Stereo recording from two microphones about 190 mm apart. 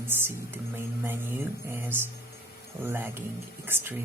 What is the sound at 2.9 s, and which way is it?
Speech, 10° right (ahead or behind).